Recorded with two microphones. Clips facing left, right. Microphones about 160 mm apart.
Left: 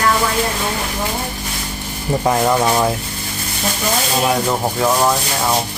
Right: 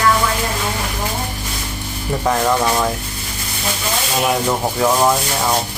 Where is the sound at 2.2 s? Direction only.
15° left (ahead or behind).